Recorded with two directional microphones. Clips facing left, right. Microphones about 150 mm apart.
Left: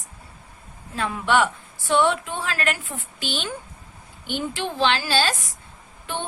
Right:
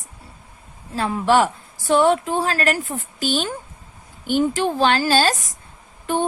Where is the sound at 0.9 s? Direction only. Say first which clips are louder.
Right 4 dB; 35° right (ahead or behind).